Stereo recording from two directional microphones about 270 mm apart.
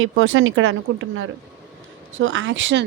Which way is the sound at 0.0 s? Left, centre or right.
Right.